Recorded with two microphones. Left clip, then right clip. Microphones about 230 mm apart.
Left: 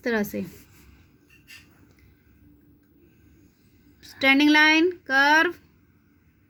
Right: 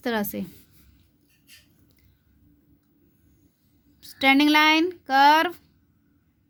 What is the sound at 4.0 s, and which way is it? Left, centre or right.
Speech, right.